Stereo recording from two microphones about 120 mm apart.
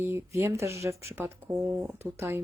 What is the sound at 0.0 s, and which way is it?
Speech, 20° right (ahead or behind).